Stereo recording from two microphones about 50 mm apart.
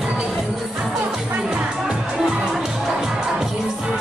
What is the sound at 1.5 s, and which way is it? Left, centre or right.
Music, centre.